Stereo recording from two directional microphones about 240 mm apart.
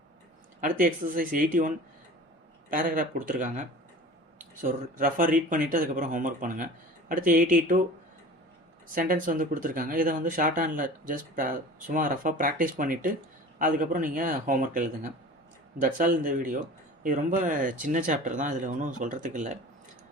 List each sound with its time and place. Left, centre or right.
0.6 s speech: right
9.0 s speech: right